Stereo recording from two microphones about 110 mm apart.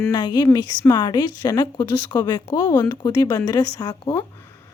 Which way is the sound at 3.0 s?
35° left (ahead or behind).